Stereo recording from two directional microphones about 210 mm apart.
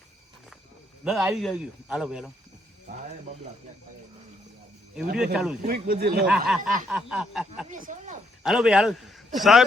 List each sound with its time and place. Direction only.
1.0 s speech: 5° right (ahead or behind)
5.1 s speech: 5° right (ahead or behind)
5.6 s speech: 45° right (ahead or behind)
6.2 s speech: 5° right (ahead or behind)
7.7 s speech: 40° right (ahead or behind)
8.4 s speech: centre (ahead or behind)